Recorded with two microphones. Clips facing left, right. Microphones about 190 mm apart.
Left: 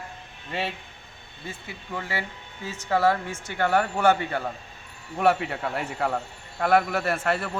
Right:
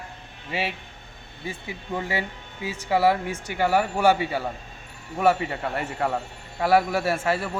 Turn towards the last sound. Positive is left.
turn(degrees=-5)  # may be behind; listen again after turning